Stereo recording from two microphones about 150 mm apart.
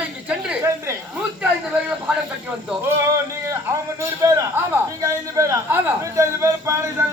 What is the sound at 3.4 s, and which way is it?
A man's voice, 20° right (ahead or behind).